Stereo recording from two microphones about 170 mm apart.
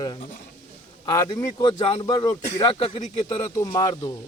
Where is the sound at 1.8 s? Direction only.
35° left (ahead or behind).